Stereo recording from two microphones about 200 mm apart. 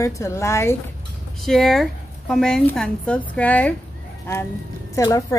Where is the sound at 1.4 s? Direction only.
Centre (ahead or behind).